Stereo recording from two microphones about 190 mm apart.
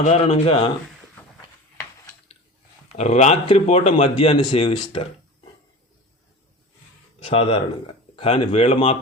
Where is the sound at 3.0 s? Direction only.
35° left (ahead or behind).